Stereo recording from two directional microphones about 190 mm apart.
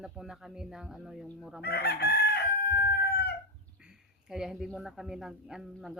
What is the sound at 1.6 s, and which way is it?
Chicken, 60° left (ahead or behind).